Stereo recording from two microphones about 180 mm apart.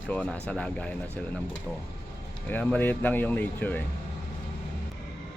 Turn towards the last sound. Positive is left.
turn(degrees=10)  # may be behind; listen again after turning